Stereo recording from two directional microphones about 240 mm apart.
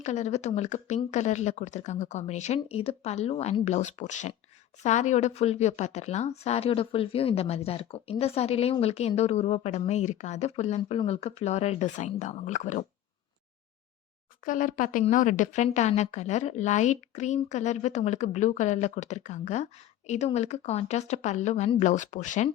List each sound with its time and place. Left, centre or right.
0.0 s speech: left
14.4 s speech: left